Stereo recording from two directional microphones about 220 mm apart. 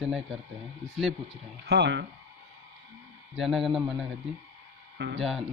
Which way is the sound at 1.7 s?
50° right (ahead or behind).